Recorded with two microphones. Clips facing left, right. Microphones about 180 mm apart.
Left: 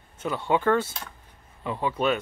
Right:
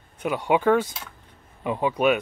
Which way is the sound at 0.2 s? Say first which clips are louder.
Right 3 dB; 15° right (ahead or behind).